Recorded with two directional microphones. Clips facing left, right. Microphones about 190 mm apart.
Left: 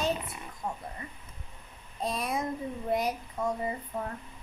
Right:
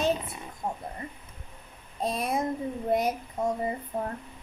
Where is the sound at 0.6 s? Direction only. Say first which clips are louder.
Right 3 dB; 35° right (ahead or behind).